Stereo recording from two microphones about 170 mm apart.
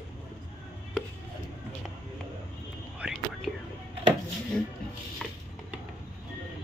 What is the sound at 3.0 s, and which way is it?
Whispering, centre (ahead or behind).